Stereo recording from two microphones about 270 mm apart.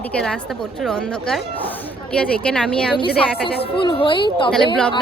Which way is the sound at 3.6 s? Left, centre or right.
Centre.